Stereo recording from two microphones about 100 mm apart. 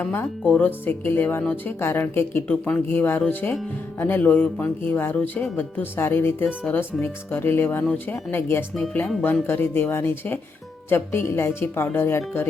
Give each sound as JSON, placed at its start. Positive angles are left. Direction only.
{"t": 0.0, "sound": "speech", "side_deg": 20}
{"t": 8.7, "sound": "speech", "side_deg": 10}